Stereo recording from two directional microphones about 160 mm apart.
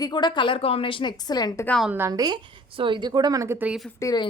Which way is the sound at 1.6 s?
5° left (ahead or behind).